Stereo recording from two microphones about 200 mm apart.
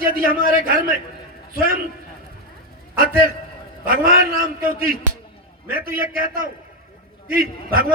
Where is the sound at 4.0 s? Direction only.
45° right (ahead or behind).